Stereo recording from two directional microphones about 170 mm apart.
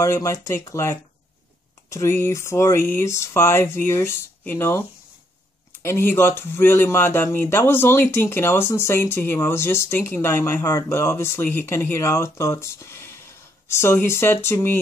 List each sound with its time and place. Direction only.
0.0 s speech: 15° left (ahead or behind)